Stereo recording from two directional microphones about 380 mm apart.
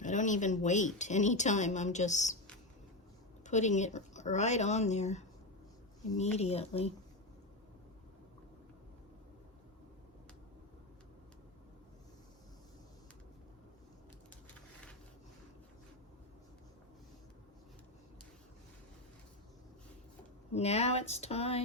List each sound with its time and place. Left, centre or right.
0.0 s speech: centre
3.4 s speech: centre
6.3 s speech: centre
20.5 s speech: centre